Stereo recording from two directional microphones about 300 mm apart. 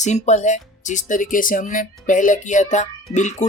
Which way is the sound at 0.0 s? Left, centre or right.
Left.